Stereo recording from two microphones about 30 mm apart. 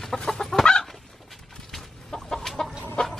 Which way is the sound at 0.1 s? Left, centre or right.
Centre.